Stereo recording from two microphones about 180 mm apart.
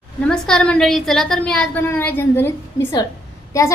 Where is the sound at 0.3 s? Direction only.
5° left (ahead or behind).